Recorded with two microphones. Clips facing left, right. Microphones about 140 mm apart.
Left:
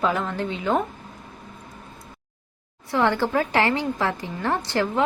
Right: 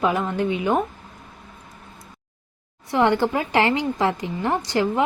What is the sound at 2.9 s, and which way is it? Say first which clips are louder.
A woman's voice: right 2 dB; 20° right (ahead or behind).